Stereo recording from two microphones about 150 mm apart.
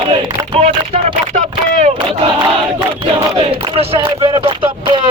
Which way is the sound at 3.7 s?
35° right (ahead or behind).